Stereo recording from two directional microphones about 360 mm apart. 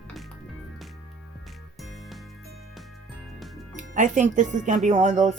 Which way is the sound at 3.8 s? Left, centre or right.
Right.